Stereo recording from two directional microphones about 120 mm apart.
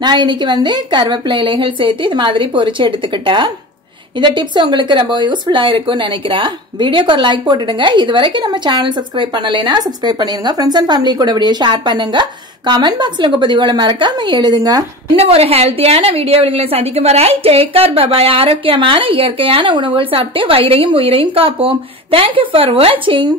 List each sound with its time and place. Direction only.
0.0 s a woman's voice: 40° right (ahead or behind)
15.1 s a woman's voice: 55° right (ahead or behind)